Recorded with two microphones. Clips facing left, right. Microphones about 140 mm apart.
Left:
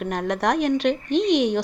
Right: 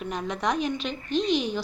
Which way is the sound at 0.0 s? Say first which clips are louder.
Left 5 dB; 65° left (ahead or behind).